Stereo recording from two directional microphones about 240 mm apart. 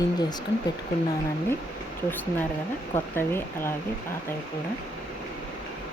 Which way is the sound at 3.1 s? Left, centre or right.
Centre.